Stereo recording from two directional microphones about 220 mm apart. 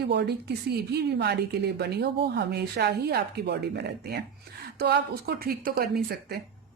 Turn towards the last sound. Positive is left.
turn(degrees=-40)  # may be behind; listen again after turning